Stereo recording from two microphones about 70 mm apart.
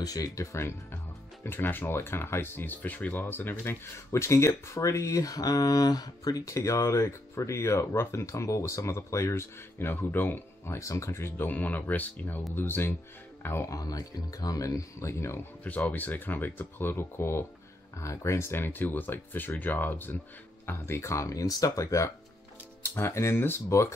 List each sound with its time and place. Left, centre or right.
0.0 s speech: left
13.7 s speech: left
15.6 s speech: left
22.8 s speech: left